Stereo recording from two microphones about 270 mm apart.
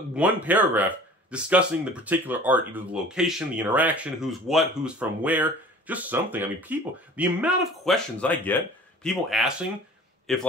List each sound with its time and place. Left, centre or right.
0.1 s speech: centre